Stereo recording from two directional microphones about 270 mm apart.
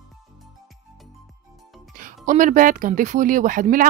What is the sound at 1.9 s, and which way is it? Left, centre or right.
Speech, right.